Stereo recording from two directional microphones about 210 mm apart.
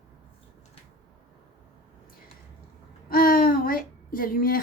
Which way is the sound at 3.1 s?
45° left (ahead or behind).